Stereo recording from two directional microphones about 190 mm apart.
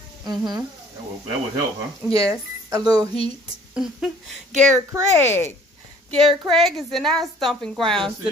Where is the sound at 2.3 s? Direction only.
20° right (ahead or behind).